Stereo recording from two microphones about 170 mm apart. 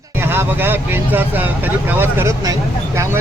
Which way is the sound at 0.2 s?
15° right (ahead or behind).